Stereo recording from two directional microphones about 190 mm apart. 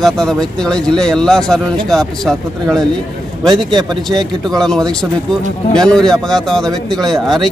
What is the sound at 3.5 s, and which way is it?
Speech, 20° right (ahead or behind).